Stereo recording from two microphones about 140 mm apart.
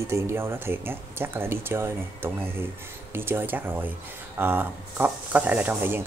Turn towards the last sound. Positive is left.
turn(degrees=-15)  # may be behind; listen again after turning